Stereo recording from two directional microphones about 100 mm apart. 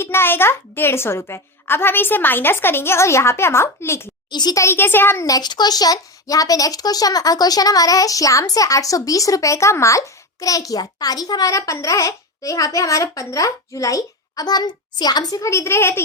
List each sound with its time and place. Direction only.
0.0 s a child's voice: 25° left (ahead or behind)
4.3 s a child's voice: 45° left (ahead or behind)
4.6 s a child's voice: 25° left (ahead or behind)
5.2 s a child's voice: 40° left (ahead or behind); by 16.0 s 25° left (ahead or behind)